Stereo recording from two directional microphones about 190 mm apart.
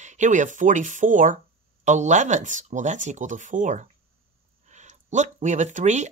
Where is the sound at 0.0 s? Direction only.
40° right (ahead or behind).